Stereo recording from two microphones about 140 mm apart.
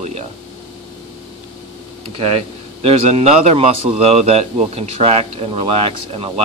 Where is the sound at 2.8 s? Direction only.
45° right (ahead or behind).